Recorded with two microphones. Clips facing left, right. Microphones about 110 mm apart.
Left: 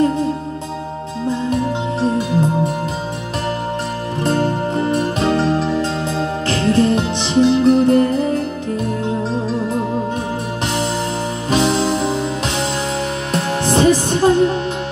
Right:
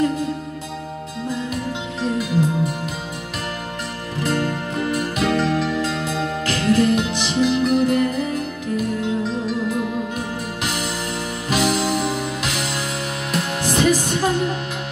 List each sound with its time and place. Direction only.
1.5 s music: 35° left (ahead or behind)
4.2 s music: 30° left (ahead or behind)
11.5 s music: 30° left (ahead or behind)